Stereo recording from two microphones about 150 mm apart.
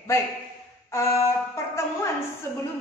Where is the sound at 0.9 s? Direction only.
20° left (ahead or behind).